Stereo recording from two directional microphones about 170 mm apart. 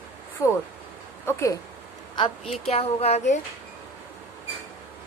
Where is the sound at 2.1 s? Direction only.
30° left (ahead or behind).